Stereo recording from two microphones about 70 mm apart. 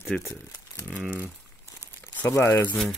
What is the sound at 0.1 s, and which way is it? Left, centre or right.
Speech, centre.